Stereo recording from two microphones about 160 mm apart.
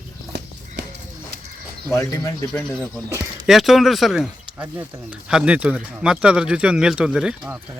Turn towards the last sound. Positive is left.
turn(degrees=-5)  # may be behind; listen again after turning